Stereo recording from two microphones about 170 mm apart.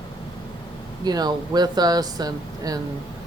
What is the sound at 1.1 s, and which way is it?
Speech, 25° right (ahead or behind).